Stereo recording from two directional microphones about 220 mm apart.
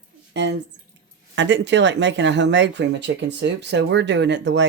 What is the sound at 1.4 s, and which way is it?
Speech, 55° right (ahead or behind).